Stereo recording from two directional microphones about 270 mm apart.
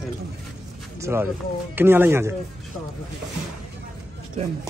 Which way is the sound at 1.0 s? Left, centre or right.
Centre.